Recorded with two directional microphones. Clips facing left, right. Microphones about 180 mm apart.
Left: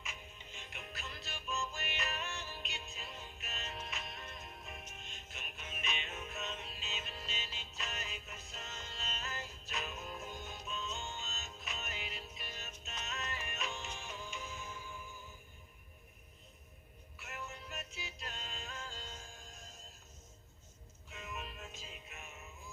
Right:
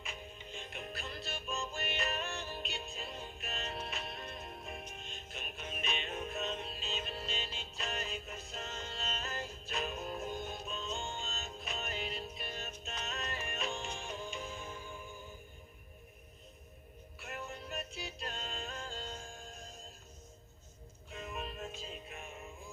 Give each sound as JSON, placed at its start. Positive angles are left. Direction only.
{"t": 0.0, "sound": "music", "side_deg": -35}
{"t": 17.2, "sound": "music", "side_deg": -35}
{"t": 21.1, "sound": "music", "side_deg": -35}